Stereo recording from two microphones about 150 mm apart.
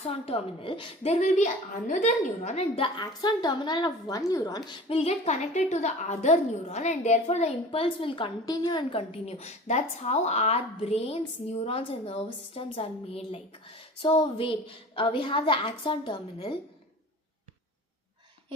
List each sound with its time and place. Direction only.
0.0 s a woman's voice: 40° left (ahead or behind)